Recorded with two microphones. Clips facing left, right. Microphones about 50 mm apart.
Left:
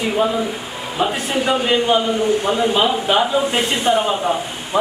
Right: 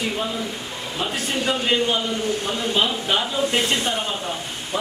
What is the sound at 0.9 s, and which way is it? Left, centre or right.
A man's voice, centre.